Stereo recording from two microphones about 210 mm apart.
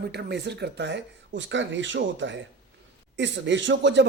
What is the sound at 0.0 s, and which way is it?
Speech, 50° right (ahead or behind).